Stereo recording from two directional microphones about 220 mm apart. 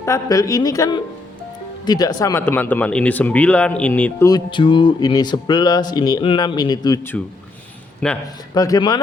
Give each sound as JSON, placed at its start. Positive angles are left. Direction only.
{"t": 0.0, "sound": "speech", "side_deg": 15}
{"t": 4.3, "sound": "speech", "side_deg": 20}
{"t": 8.5, "sound": "speech", "side_deg": 15}